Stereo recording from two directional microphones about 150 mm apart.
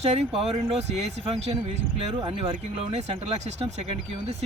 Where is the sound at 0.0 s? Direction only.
45° right (ahead or behind).